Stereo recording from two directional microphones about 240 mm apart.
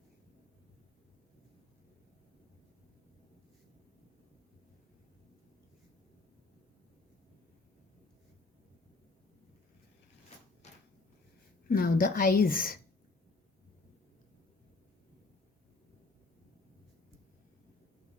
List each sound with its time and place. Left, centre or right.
11.7 s a woman's voice: left